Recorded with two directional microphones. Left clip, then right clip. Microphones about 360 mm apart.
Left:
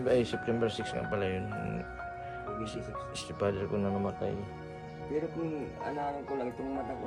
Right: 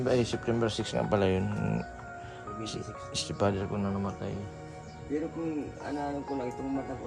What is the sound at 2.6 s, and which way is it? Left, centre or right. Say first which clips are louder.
Speech: even; centre.